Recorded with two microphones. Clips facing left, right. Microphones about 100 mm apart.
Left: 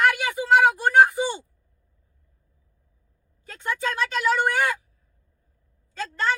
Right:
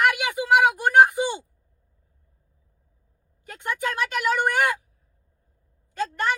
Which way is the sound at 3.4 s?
15° right (ahead or behind).